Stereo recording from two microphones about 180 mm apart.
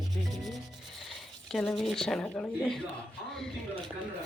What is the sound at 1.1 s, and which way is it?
Speech, centre (ahead or behind).